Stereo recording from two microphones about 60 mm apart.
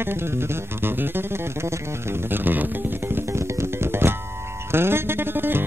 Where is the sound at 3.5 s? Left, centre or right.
Right.